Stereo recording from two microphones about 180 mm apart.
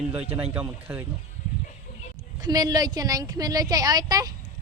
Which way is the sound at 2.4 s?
20° right (ahead or behind).